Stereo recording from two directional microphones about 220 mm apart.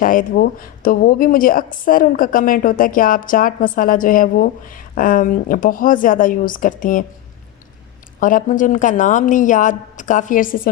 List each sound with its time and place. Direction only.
0.0 s a woman's voice: 40° left (ahead or behind)
8.2 s a woman's voice: 35° left (ahead or behind)